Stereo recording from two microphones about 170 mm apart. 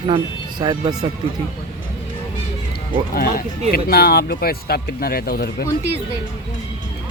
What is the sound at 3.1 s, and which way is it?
Speech, 60° left (ahead or behind).